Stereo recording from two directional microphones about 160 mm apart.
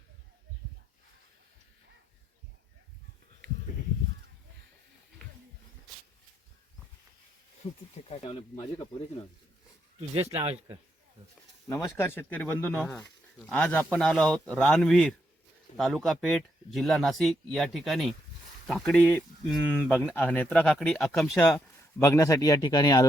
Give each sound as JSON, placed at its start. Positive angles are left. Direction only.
{"t": 7.6, "sound": "speech", "side_deg": 40}
{"t": 10.2, "sound": "a man's voice", "side_deg": -40}
{"t": 11.7, "sound": "speech", "side_deg": 15}
{"t": 22.0, "sound": "speech", "side_deg": 20}